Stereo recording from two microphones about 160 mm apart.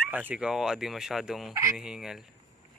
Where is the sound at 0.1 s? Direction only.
10° right (ahead or behind).